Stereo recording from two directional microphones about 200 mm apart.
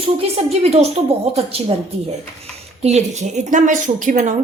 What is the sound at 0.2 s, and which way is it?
A woman's voice, 30° right (ahead or behind).